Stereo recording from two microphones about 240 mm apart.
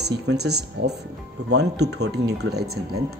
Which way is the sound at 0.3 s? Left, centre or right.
Right.